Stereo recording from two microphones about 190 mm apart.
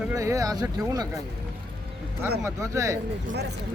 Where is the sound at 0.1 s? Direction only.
15° right (ahead or behind).